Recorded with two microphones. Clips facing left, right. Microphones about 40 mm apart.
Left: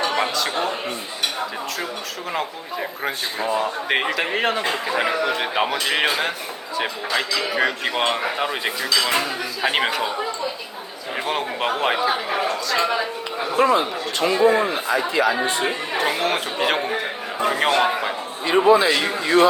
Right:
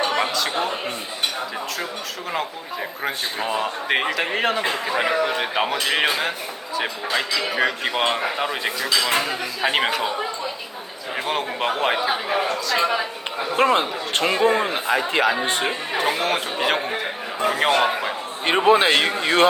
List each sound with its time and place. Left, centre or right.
0.1 s a man's voice: centre
3.4 s a man's voice: right
3.8 s a man's voice: centre
9.0 s speech: centre
9.6 s a man's voice: centre
11.3 s a man's voice: centre
13.6 s a man's voice: right
15.9 s a man's voice: centre
18.5 s a man's voice: right